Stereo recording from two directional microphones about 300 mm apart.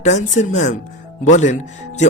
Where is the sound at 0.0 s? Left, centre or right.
Left.